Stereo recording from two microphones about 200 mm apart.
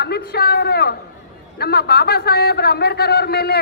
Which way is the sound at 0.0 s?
55° left (ahead or behind).